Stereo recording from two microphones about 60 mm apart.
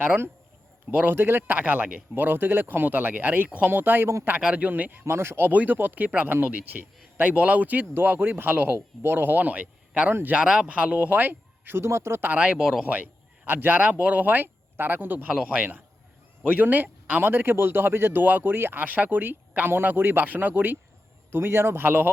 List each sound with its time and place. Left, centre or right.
0.9 s speech: right
4.4 s speech: right
4.7 s speech: right
5.0 s speech: right
5.5 s speech: right
11.9 s speech: right
12.4 s speech: centre
12.8 s a man's voice: right
15.3 s speech: centre
15.5 s speech: right